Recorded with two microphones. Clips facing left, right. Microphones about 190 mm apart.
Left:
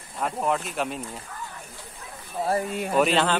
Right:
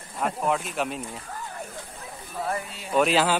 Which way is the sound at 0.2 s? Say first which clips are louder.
Even; centre (ahead or behind).